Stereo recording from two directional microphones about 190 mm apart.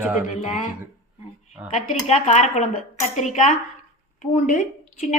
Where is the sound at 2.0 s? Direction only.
35° left (ahead or behind).